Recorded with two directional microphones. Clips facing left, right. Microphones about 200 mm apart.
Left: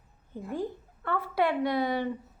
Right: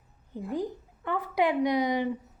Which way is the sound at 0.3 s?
15° right (ahead or behind).